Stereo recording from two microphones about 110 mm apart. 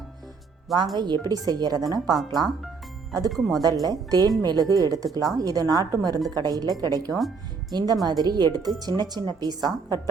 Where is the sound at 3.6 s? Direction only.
35° right (ahead or behind).